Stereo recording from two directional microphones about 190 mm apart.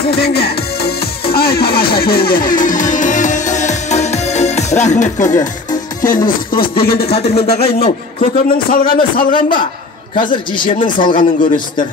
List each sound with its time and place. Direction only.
0.1 s music: 55° left (ahead or behind); by 5.3 s 40° left (ahead or behind)
5.3 s speech: 20° left (ahead or behind)
6.0 s a man's voice: 45° left (ahead or behind)
7.1 s speech: 35° left (ahead or behind)
7.4 s a man's voice: 55° left (ahead or behind)
10.3 s speech: 25° left (ahead or behind)